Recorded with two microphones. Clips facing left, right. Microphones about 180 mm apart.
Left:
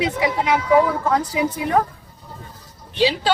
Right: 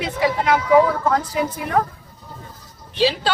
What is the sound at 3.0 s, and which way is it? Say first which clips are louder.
Speech: even; 15° left (ahead or behind).